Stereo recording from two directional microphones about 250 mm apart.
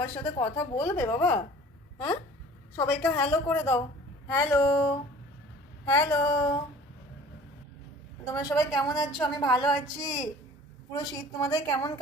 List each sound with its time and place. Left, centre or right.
0.0 s a woman's voice: centre
2.7 s a woman's voice: centre
8.3 s a woman's voice: centre